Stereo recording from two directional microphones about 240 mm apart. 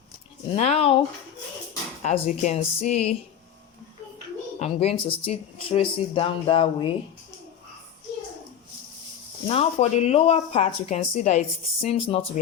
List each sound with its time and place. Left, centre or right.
0.5 s speech: left
2.0 s speech: left
4.6 s speech: left
9.5 s speech: left